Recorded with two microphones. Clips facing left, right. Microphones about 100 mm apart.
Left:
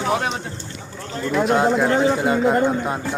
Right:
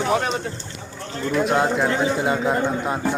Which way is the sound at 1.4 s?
Centre (ahead or behind).